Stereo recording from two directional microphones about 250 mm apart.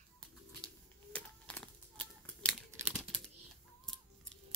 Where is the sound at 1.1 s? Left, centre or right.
Centre.